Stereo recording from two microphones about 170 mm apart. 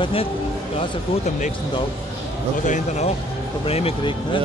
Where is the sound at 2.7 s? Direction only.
40° left (ahead or behind).